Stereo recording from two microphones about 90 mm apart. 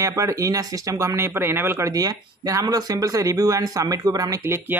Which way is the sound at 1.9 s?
45° right (ahead or behind).